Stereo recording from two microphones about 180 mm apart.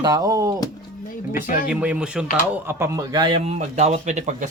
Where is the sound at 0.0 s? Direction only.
20° right (ahead or behind).